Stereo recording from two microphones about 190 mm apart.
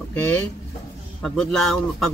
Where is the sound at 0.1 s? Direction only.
5° left (ahead or behind).